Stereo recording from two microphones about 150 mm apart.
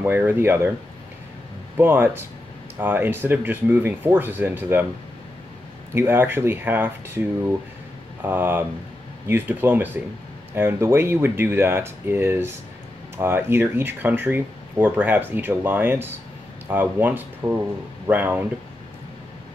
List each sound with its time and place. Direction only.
0.0 s speech: 10° right (ahead or behind)
1.8 s speech: 15° right (ahead or behind)
5.9 s speech: 15° right (ahead or behind)
8.2 s speech: 15° right (ahead or behind)